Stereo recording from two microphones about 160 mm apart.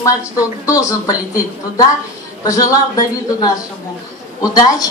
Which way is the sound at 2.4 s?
20° left (ahead or behind).